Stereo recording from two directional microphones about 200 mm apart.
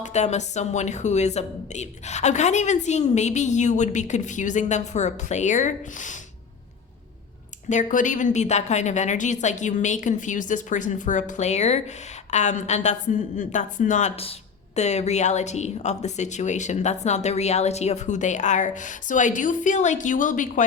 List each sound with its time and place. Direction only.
0.0 s a woman's voice: 35° left (ahead or behind)
7.7 s a woman's voice: 40° left (ahead or behind)